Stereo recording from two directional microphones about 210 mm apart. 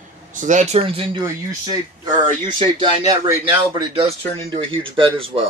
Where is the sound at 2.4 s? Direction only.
20° right (ahead or behind).